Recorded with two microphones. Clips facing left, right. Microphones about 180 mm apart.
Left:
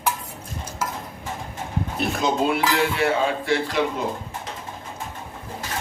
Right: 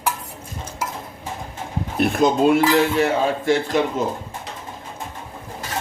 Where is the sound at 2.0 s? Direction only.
50° right (ahead or behind).